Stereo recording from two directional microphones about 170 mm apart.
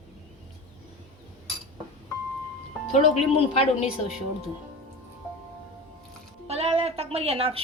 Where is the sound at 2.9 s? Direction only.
35° left (ahead or behind).